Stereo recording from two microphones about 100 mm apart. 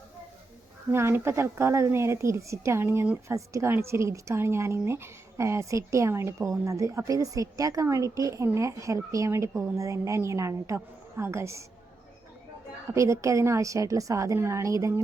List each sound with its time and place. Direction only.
0.9 s a woman's voice: 25° right (ahead or behind)
12.9 s a woman's voice: 30° right (ahead or behind)